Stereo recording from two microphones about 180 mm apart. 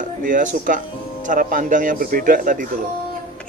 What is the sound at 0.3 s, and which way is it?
Speech, 45° right (ahead or behind).